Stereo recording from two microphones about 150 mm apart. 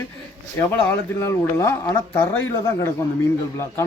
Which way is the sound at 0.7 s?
15° left (ahead or behind).